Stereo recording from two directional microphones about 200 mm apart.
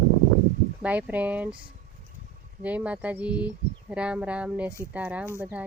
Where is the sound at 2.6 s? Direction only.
5° right (ahead or behind).